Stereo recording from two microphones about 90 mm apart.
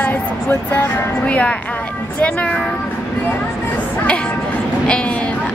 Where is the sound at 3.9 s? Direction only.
10° left (ahead or behind).